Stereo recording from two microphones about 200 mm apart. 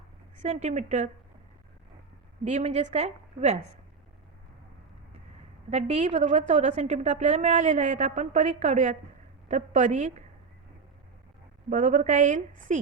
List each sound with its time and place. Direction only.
0.4 s a woman's voice: 35° right (ahead or behind)
2.4 s a woman's voice: 35° right (ahead or behind)
5.7 s a woman's voice: 35° right (ahead or behind)
11.7 s a woman's voice: 40° right (ahead or behind)